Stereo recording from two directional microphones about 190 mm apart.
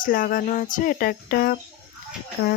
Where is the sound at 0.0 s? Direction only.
50° left (ahead or behind).